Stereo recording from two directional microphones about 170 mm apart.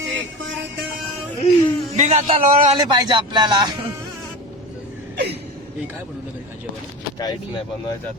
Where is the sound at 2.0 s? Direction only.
45° right (ahead or behind).